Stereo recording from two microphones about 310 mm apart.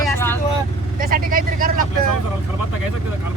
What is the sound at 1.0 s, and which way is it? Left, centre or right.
Speech, right.